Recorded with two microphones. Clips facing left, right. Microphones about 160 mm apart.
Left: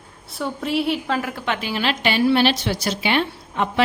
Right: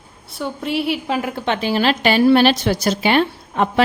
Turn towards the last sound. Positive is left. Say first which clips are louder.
# right 4 dB
turn(degrees=-45)  # may be behind; listen again after turning